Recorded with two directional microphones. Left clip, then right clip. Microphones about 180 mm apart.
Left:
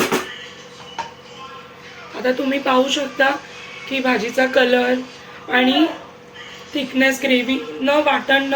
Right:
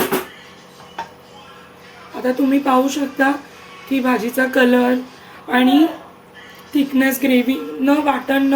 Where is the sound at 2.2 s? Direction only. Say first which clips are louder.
Right 2 dB; 40° right (ahead or behind).